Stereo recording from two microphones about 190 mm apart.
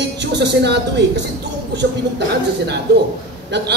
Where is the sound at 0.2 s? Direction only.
65° right (ahead or behind).